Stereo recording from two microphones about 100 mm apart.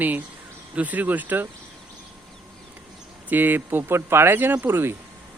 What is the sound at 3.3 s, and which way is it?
Speech, 20° right (ahead or behind).